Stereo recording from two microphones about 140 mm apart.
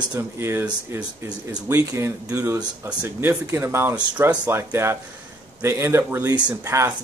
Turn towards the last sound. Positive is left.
turn(degrees=-15)  # may be behind; listen again after turning